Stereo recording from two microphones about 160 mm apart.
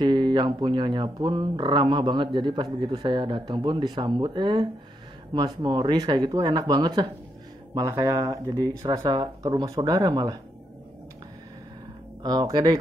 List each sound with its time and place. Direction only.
0.0 s speech: 30° right (ahead or behind)
12.2 s speech: 25° right (ahead or behind)